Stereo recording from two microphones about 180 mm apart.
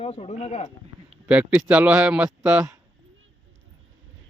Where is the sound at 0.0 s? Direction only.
35° left (ahead or behind).